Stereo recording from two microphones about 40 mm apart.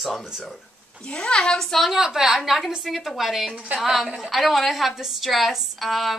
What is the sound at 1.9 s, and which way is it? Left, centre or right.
A woman's voice, centre.